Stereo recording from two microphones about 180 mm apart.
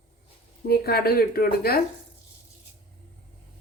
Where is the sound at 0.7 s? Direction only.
60° left (ahead or behind).